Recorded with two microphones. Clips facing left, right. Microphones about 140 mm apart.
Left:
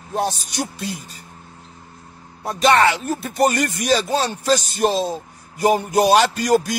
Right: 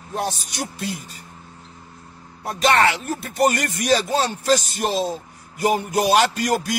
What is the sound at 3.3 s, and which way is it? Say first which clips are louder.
A man's voice: left 1 dB; 30° left (ahead or behind).